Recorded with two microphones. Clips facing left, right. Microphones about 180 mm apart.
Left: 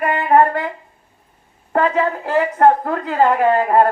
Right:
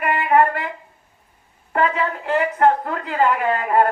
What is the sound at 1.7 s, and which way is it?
A woman's voice, 35° left (ahead or behind).